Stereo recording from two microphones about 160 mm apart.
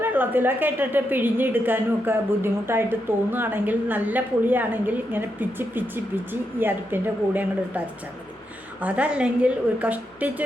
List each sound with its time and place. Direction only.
0.0 s a woman's voice: 10° right (ahead or behind)
8.8 s a woman's voice: 10° right (ahead or behind)